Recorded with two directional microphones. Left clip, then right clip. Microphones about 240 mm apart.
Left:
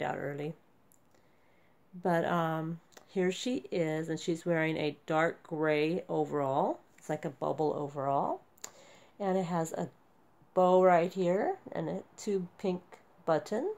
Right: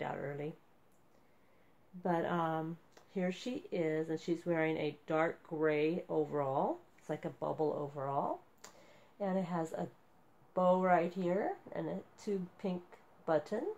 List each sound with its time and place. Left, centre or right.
0.0 s speech: left
2.0 s speech: left